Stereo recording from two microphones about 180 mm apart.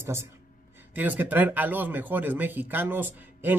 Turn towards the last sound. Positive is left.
turn(degrees=-10)  # may be behind; listen again after turning